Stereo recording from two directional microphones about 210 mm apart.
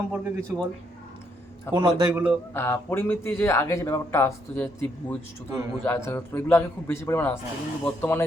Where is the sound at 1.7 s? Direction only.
20° right (ahead or behind).